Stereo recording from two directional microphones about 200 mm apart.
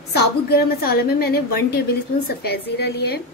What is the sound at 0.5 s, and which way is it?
A woman's voice, 50° left (ahead or behind).